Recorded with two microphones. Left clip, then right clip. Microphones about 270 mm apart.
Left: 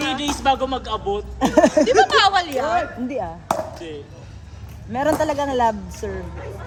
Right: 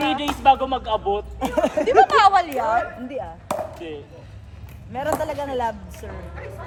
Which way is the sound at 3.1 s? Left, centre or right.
Left.